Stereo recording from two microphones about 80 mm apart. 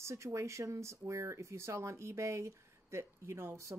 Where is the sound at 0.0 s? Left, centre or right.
Right.